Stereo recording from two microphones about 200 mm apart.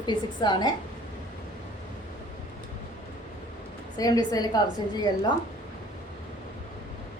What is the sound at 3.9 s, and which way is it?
Speech, 20° left (ahead or behind).